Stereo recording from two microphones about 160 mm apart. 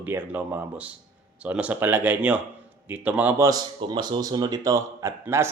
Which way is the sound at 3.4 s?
25° right (ahead or behind).